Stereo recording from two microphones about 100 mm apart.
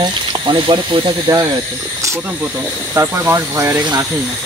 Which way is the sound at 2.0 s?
30° right (ahead or behind).